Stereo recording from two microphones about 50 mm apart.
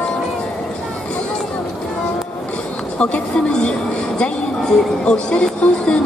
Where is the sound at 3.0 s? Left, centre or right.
Left.